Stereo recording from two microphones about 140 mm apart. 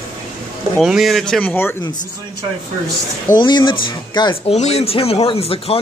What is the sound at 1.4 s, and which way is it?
Speech, 10° left (ahead or behind).